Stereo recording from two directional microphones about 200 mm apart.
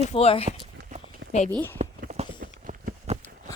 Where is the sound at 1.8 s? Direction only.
35° right (ahead or behind).